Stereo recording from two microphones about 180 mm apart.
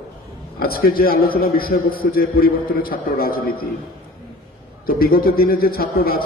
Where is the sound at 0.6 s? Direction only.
55° left (ahead or behind).